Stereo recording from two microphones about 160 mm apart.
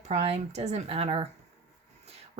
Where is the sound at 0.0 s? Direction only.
45° right (ahead or behind).